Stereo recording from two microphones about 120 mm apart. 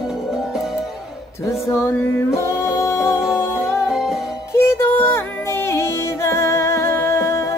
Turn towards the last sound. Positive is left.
turn(degrees=25)  # may be behind; listen again after turning